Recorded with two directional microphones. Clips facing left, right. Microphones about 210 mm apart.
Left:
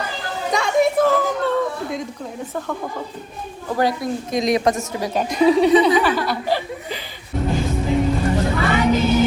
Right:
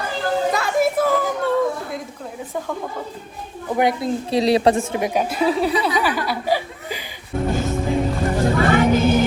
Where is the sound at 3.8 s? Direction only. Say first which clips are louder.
Right 1 dB; 25° right (ahead or behind).